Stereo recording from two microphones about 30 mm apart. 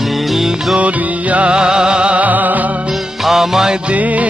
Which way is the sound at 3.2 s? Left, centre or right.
Centre.